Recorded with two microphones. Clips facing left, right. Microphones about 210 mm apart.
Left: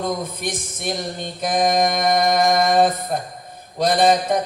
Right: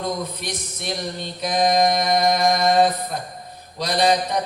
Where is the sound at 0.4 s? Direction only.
50° left (ahead or behind).